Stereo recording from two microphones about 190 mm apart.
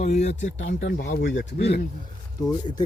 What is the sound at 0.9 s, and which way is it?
Speech, 45° left (ahead or behind).